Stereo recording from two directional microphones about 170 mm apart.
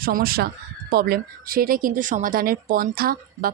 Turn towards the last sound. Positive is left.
turn(degrees=-60)  # may be behind; listen again after turning